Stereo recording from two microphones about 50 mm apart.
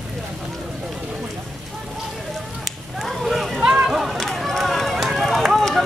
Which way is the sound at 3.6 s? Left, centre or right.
Centre.